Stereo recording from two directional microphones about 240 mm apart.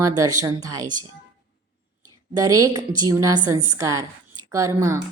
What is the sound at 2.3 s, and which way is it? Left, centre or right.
A woman's voice, centre.